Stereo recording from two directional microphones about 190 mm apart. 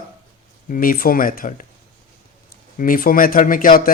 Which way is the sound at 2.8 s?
50° left (ahead or behind).